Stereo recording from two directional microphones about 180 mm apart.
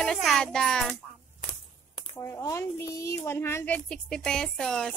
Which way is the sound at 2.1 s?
15° left (ahead or behind).